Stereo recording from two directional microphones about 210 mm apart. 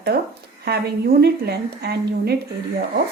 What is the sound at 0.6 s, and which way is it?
A woman's voice, 50° right (ahead or behind).